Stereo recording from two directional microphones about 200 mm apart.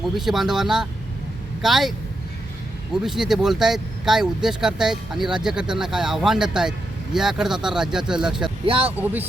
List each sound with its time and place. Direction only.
0.0 s speech: centre (ahead or behind)
2.9 s speech: centre (ahead or behind)
8.6 s speech: 25° right (ahead or behind)